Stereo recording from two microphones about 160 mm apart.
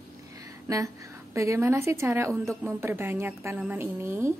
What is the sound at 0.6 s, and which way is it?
A woman's voice, 20° right (ahead or behind).